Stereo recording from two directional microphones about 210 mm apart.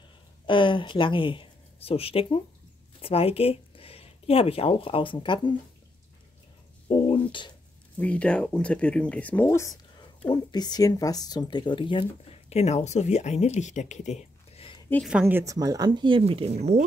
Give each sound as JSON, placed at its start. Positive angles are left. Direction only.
{"t": 0.5, "sound": "speech", "side_deg": 25}
{"t": 6.9, "sound": "a sound", "side_deg": 25}
{"t": 8.0, "sound": "speech", "side_deg": 5}
{"t": 15.0, "sound": "speech", "side_deg": -5}